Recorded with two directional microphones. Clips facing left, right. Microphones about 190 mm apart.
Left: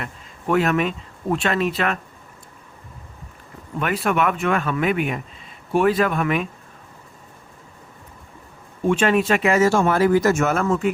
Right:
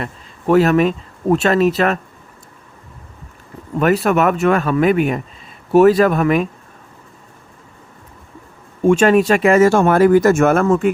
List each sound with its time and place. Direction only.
0.0 s speech: 35° right (ahead or behind)
3.8 s speech: 40° right (ahead or behind)
8.9 s speech: 45° right (ahead or behind)